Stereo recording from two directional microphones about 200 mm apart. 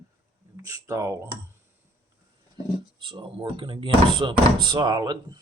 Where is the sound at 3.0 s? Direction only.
25° right (ahead or behind).